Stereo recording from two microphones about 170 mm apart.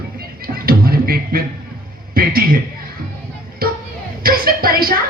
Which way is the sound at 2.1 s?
60° right (ahead or behind).